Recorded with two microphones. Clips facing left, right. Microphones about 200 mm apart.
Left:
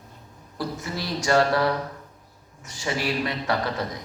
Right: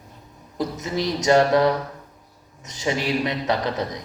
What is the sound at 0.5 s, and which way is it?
A man's voice, 20° right (ahead or behind).